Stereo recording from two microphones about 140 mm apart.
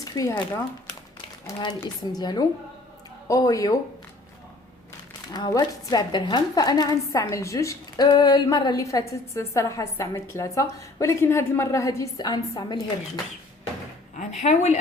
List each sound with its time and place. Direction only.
0.0 s a sound: 25° left (ahead or behind)
1.5 s a woman's voice: 30° left (ahead or behind)
5.3 s a woman's voice: 30° left (ahead or behind)
14.2 s speech: 55° left (ahead or behind)